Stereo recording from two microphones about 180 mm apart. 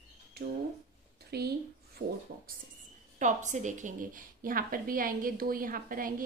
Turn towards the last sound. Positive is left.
turn(degrees=-50)  # may be behind; listen again after turning